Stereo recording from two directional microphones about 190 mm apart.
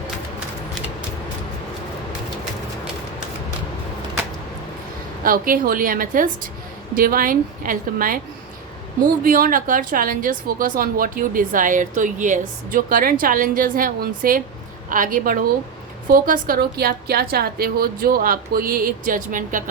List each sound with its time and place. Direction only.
5.2 s speech: 50° right (ahead or behind)
9.2 s speech: 45° right (ahead or behind)